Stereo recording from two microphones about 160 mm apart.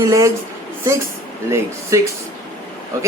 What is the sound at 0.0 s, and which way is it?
Speech, 20° right (ahead or behind).